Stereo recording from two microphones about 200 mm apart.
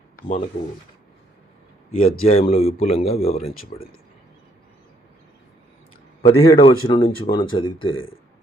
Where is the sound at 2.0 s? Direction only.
30° left (ahead or behind).